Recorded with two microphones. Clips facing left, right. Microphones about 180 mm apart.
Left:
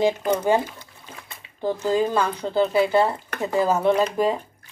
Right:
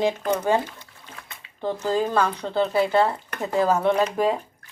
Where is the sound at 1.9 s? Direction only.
5° left (ahead or behind).